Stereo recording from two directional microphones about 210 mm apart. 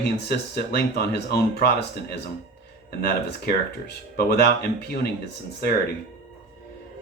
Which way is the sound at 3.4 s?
50° left (ahead or behind).